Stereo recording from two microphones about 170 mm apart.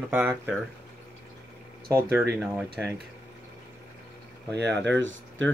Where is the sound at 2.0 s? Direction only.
10° right (ahead or behind).